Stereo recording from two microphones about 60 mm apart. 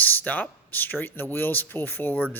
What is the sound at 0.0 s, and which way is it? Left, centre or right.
Speech, left.